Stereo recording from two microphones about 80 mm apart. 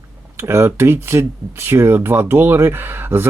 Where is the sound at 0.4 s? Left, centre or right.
Right.